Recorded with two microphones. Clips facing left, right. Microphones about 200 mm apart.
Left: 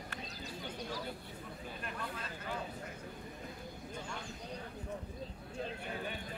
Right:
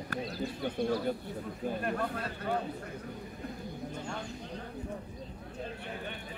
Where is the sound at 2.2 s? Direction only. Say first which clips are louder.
Right 9 dB; 60° right (ahead or behind).